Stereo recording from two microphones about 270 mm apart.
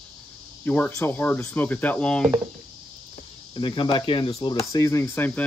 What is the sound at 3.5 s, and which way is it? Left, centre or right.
Speech, centre.